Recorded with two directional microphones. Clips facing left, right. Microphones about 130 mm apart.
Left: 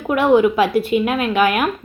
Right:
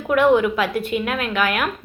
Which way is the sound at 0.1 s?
20° left (ahead or behind).